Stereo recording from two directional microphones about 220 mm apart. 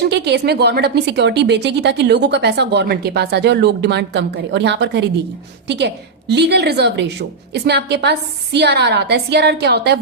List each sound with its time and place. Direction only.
0.1 s a woman's voice: 50° right (ahead or behind)